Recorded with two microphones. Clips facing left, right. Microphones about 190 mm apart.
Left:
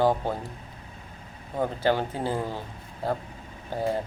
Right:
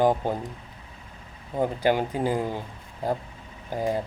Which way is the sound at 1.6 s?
15° right (ahead or behind).